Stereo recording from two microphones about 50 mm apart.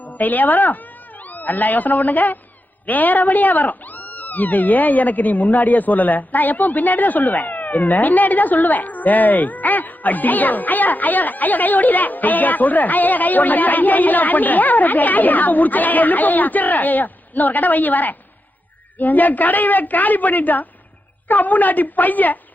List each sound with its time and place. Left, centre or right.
0.0 s speech: left